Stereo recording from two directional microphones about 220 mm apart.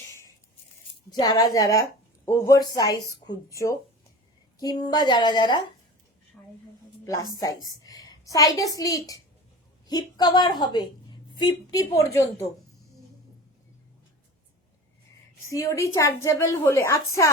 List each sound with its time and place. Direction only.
1.2 s a woman's voice: 15° left (ahead or behind)
6.4 s a woman's voice: 5° left (ahead or behind)
15.4 s a woman's voice: 15° left (ahead or behind)